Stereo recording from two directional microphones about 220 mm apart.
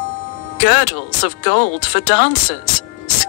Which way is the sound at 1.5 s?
50° left (ahead or behind).